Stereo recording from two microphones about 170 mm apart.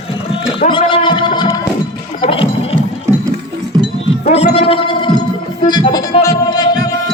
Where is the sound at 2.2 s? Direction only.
30° left (ahead or behind).